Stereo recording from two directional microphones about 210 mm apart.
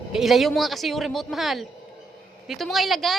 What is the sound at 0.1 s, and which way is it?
Speech, centre (ahead or behind).